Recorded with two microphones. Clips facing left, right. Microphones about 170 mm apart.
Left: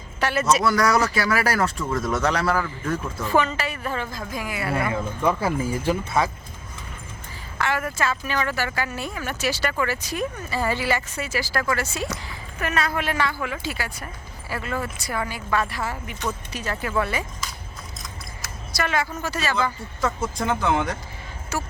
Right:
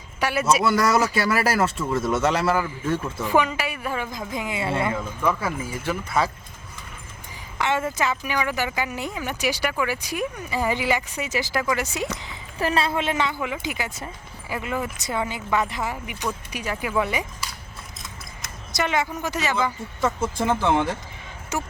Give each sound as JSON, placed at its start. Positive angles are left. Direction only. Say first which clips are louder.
{"t": 0.2, "sound": "speech", "louder": "even", "side_deg": -10}
{"t": 5.4, "sound": "speech", "louder": "left 4 dB", "side_deg": 30}
{"t": 7.6, "sound": "speech", "louder": "right 1 dB", "side_deg": -20}
{"t": 12.5, "sound": "speech", "louder": "right 2 dB", "side_deg": -30}
{"t": 18.7, "sound": "a woman's voice", "louder": "right 1 dB", "side_deg": -20}
{"t": 20.5, "sound": "speech", "louder": "right 1 dB", "side_deg": 0}
{"t": 21.5, "sound": "speech", "louder": "right 1 dB", "side_deg": -20}